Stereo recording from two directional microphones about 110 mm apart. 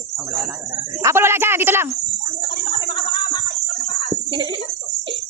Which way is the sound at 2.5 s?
45° left (ahead or behind).